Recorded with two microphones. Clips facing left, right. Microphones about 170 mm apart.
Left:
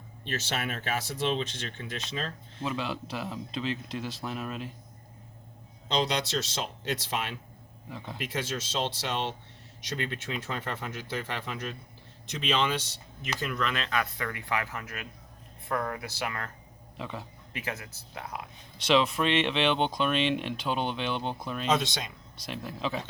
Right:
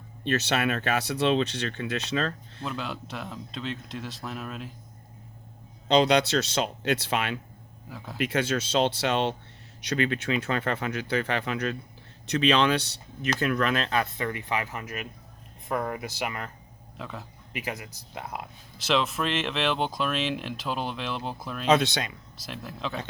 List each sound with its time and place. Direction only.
0.3 s speech: 70° right (ahead or behind)
2.6 s speech: centre (ahead or behind)
5.9 s speech: 65° right (ahead or behind)
7.9 s speech: centre (ahead or behind)
8.2 s speech: 70° right (ahead or behind)
9.9 s speech: 80° right; by 16.5 s 20° right (ahead or behind)
17.0 s speech: centre (ahead or behind)
17.5 s speech: 15° right (ahead or behind)
18.8 s speech: centre (ahead or behind)
21.7 s speech: 65° right (ahead or behind)
22.4 s speech: centre (ahead or behind)